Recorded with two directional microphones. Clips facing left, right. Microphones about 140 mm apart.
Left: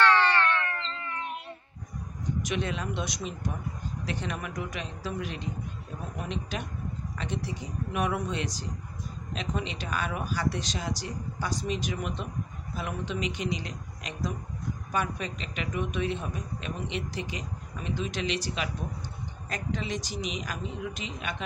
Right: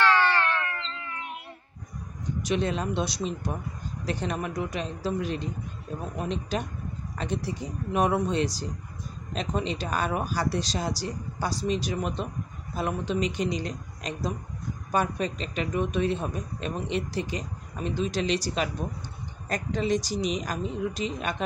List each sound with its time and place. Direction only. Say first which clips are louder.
2.4 s a man's voice: right 7 dB; 35° right (ahead or behind)